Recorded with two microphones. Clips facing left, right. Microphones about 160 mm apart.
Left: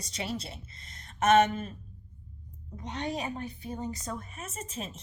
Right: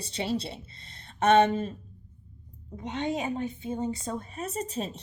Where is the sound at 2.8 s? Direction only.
20° right (ahead or behind).